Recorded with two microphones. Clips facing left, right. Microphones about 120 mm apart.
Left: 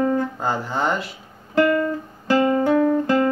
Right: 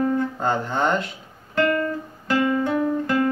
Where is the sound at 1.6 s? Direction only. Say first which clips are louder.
Left 3 dB; 25° left (ahead or behind).